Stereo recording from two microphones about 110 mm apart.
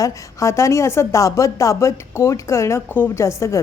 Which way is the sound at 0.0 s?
30° left (ahead or behind).